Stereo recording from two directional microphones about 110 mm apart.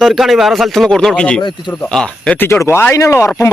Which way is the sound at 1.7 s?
5° left (ahead or behind).